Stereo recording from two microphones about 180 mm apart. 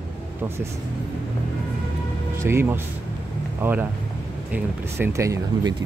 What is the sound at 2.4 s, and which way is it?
Speech, 15° right (ahead or behind).